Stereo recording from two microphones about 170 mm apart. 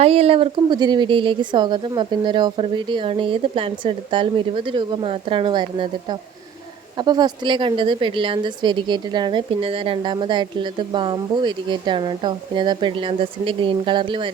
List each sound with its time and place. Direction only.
0.0 s a woman's voice: 35° right (ahead or behind)